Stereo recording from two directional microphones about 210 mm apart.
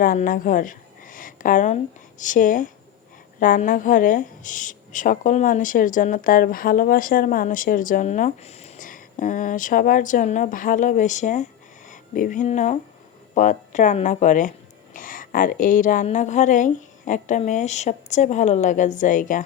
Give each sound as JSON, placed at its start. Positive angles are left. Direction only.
{"t": 0.0, "sound": "a woman's voice", "side_deg": 40}